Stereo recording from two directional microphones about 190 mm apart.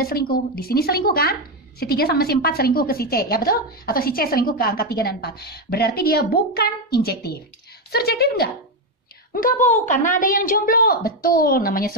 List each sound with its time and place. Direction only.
0.0 s speech: 50° left (ahead or behind)